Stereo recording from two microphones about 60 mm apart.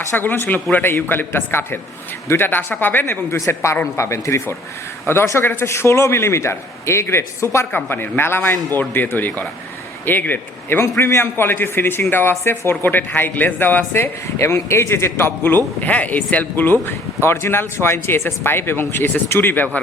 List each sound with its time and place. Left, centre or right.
0.1 s speech: left
3.5 s a man's voice: left
5.6 s a man's voice: left
7.9 s a man's voice: left
14.3 s a man's voice: left
15.2 s speech: left
17.2 s speech: left